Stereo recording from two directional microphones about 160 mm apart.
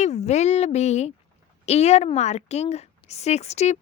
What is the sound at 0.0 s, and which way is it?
A woman's voice, 45° left (ahead or behind).